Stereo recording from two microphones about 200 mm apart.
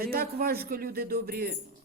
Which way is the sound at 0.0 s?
50° right (ahead or behind).